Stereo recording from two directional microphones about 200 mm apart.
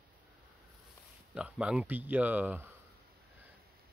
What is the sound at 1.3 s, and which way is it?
Speech, 5° right (ahead or behind).